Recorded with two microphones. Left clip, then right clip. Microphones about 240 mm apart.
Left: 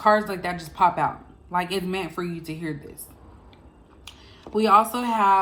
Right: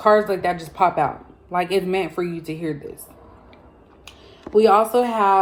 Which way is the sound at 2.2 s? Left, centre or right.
Centre.